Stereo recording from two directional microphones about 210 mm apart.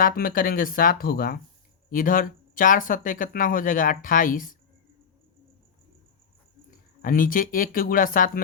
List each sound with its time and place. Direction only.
0.0 s speech: 45° left (ahead or behind)
6.7 s speech: 40° left (ahead or behind)